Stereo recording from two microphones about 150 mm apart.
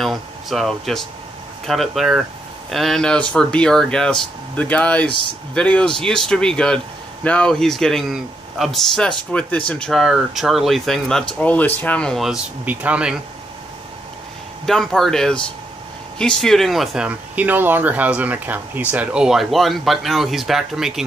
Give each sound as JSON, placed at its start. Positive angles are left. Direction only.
{"t": 0.0, "sound": "speech", "side_deg": 0}
{"t": 14.7, "sound": "speech", "side_deg": 0}